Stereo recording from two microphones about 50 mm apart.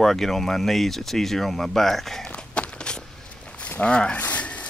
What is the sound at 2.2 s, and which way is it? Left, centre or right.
Walk, left.